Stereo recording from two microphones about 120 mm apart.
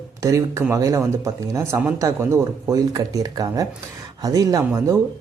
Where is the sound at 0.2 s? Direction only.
25° right (ahead or behind).